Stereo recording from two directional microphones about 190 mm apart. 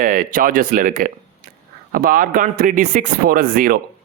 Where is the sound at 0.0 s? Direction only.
45° right (ahead or behind).